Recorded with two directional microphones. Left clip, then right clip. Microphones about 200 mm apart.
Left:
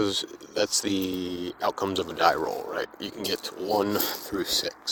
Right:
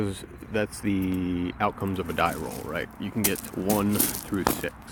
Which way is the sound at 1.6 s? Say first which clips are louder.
Left 2 dB; 50° left (ahead or behind).